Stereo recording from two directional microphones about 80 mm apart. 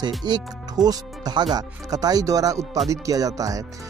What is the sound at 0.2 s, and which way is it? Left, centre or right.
Speech, right.